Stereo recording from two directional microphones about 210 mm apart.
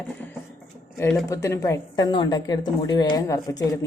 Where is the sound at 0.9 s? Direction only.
15° left (ahead or behind).